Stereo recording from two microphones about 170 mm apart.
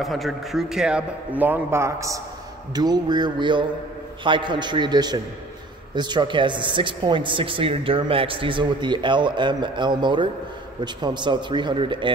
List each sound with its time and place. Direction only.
0.0 s a man's voice: centre (ahead or behind); by 12.1 s 30° right (ahead or behind)